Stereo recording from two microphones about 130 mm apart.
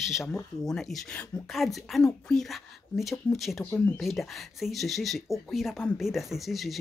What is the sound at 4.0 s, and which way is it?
Speech, centre (ahead or behind).